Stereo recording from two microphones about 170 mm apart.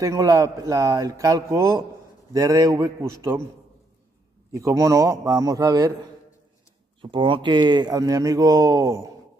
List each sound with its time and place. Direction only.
0.0 s speech: 20° right (ahead or behind)
4.5 s speech: 20° right (ahead or behind)
7.0 s speech: 30° right (ahead or behind)